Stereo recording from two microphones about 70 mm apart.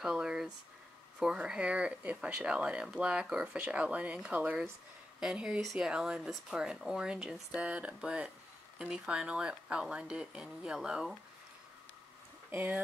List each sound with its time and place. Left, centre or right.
0.0 s a sound: centre
1.2 s speech: centre
5.2 s speech: centre
12.4 s speech: right